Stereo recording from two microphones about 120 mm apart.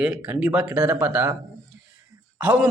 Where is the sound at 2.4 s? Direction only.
10° right (ahead or behind).